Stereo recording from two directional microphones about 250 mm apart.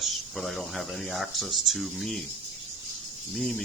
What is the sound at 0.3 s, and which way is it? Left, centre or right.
Speech, centre.